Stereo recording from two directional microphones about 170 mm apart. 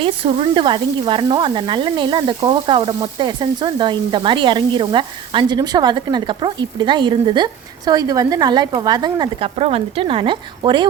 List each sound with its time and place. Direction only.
0.0 s speech: 30° right (ahead or behind)